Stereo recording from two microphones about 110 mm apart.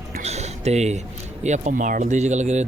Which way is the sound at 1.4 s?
90° right.